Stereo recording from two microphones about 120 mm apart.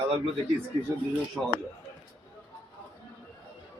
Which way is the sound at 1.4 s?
15° right (ahead or behind).